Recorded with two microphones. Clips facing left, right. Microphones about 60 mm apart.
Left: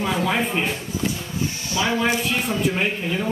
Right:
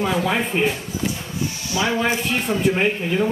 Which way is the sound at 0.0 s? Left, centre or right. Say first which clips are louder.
Right 1 dB; centre.